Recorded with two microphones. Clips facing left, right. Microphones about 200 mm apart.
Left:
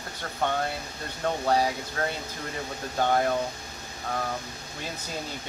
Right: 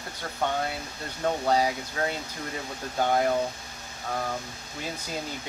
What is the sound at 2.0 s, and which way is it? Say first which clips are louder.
Speech: right 1 dB; 15° right (ahead or behind).